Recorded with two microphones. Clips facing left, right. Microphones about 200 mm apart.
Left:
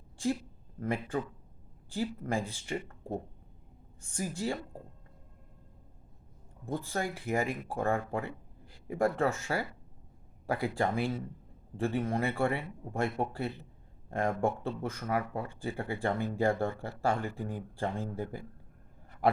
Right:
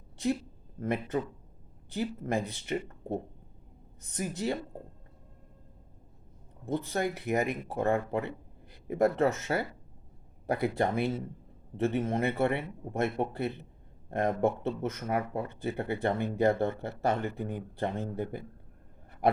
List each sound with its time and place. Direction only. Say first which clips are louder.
0.8 s speech: right 2 dB; 20° right (ahead or behind)
4.0 s speech: right 2 dB; 20° right (ahead or behind)
6.7 s speech: right 4 dB; 20° right (ahead or behind)
19.2 s a sound: right 1 dB; 20° right (ahead or behind)